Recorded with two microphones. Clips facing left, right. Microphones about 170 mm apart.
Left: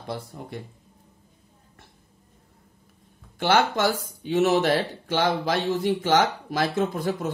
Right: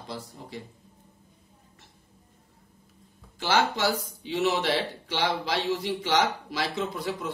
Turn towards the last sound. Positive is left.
turn(degrees=50)  # may be behind; listen again after turning